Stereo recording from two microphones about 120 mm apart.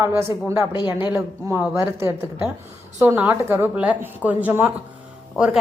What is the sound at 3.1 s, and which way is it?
A woman's voice, 15° right (ahead or behind).